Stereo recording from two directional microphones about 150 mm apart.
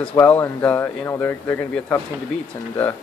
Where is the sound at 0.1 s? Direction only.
15° left (ahead or behind).